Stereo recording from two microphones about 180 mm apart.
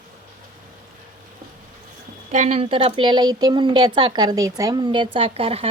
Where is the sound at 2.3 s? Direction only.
40° right (ahead or behind).